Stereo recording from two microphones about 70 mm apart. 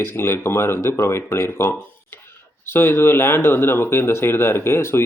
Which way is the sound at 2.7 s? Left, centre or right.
Left.